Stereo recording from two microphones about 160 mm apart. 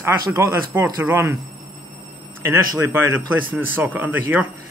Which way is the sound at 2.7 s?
15° right (ahead or behind).